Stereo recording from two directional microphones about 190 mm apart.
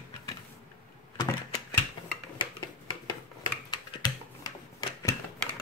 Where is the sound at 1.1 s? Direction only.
20° left (ahead or behind).